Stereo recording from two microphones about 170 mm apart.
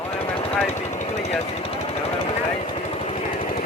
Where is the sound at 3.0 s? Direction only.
35° left (ahead or behind).